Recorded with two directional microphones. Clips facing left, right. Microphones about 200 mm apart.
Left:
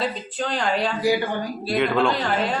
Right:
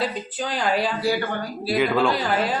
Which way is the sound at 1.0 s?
15° left (ahead or behind).